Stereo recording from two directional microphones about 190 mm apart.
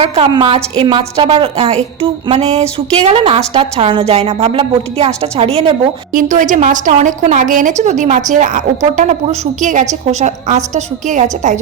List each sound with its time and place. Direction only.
0.0 s a woman's voice: 30° right (ahead or behind)